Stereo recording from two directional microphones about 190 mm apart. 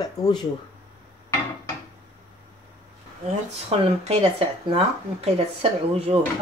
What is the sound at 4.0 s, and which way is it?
Speech, 35° right (ahead or behind).